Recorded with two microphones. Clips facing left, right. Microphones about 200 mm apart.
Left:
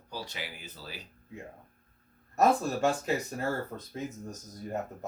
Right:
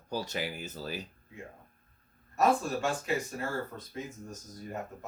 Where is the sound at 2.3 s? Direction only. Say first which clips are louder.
Left 2 dB; 40° left (ahead or behind).